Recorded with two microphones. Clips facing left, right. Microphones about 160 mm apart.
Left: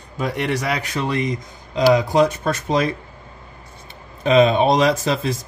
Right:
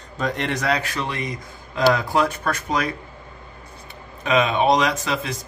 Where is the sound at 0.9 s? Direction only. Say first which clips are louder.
Left 5 dB; 30° left (ahead or behind).